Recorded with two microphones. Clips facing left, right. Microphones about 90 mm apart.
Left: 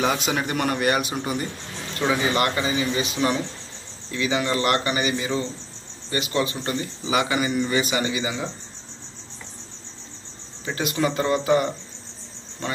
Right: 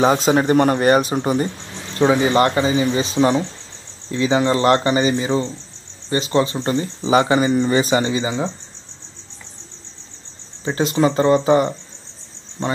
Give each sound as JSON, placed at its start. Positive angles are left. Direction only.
{"t": 0.0, "sound": "speech", "side_deg": -35}
{"t": 10.6, "sound": "speech", "side_deg": -30}